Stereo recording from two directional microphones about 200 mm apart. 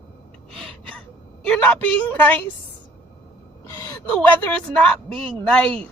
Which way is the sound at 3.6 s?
15° left (ahead or behind).